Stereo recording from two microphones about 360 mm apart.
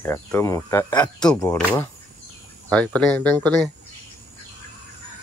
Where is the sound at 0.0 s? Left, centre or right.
Centre.